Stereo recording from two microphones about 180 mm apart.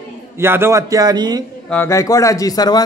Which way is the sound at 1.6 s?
10° left (ahead or behind).